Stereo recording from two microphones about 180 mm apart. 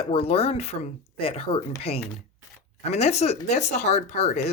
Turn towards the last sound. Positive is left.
turn(degrees=35)  # may be behind; listen again after turning